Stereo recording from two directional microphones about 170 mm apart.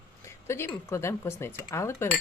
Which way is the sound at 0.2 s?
15° left (ahead or behind).